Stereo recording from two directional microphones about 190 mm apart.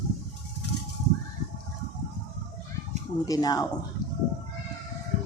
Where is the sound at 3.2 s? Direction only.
20° left (ahead or behind).